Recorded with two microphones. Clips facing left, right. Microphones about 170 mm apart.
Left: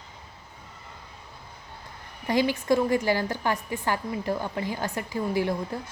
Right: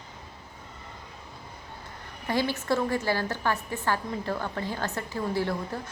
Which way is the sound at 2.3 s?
15° left (ahead or behind).